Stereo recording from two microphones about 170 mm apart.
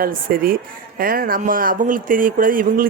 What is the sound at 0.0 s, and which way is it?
A woman's voice, 55° right (ahead or behind).